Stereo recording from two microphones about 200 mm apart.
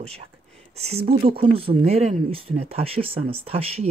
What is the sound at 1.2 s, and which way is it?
Speech, 30° right (ahead or behind).